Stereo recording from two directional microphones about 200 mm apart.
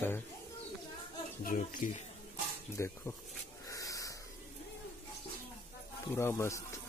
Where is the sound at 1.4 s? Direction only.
40° left (ahead or behind).